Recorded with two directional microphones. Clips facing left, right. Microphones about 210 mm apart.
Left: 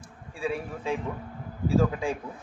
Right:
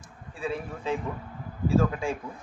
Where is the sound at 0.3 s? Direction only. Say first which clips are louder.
Left 1 dB; 10° left (ahead or behind).